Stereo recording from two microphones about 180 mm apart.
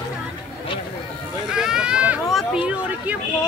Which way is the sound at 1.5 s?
5° right (ahead or behind).